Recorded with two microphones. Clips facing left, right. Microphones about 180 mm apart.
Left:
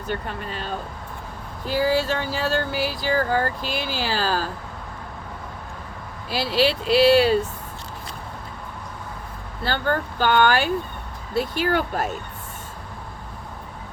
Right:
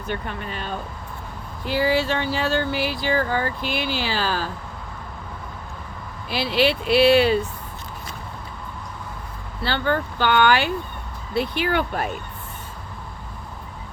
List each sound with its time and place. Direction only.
0.1 s speech: 35° left (ahead or behind)
6.3 s speech: 40° left (ahead or behind)
9.6 s speech: 45° left (ahead or behind)